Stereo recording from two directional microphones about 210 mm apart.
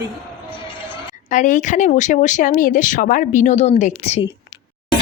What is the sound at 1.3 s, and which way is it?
Speech, 35° left (ahead or behind).